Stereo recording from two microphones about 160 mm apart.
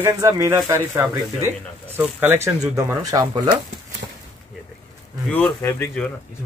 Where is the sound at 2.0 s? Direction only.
10° right (ahead or behind).